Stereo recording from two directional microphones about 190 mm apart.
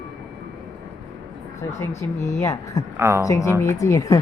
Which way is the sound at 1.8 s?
15° left (ahead or behind).